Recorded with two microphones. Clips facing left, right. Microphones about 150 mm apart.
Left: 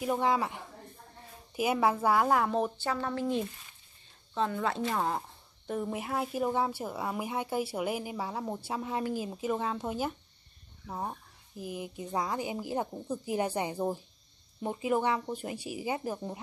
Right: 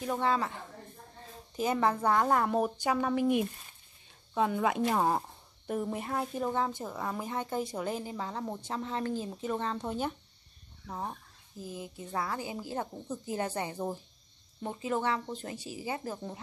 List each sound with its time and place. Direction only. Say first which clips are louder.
0.0 s speech: left 2 dB; 15° left (ahead or behind)
2.6 s speech: right 2 dB; 15° right (ahead or behind)
5.7 s speech: even; centre (ahead or behind)